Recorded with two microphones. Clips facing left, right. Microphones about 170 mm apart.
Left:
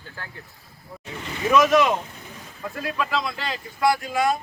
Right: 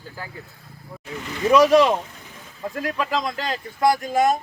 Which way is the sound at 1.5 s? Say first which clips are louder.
Right 3 dB; 35° right (ahead or behind).